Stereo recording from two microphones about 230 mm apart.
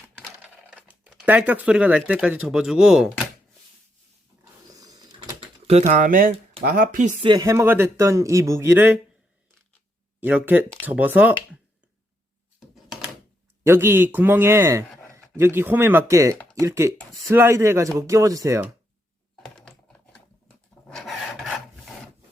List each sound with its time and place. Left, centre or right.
0.3 s speech: centre
4.7 s a sound: centre; by 6.3 s right
6.6 s speech: right
7.3 s speech: centre
10.2 s speech: centre
12.5 s a sound: centre
13.7 s speech: centre
19.5 s typing: centre
20.8 s filing: centre